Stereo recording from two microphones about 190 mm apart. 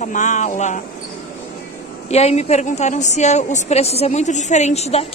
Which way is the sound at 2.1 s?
35° left (ahead or behind).